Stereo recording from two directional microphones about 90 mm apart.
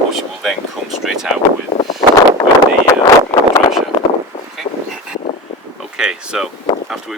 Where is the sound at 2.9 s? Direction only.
40° left (ahead or behind).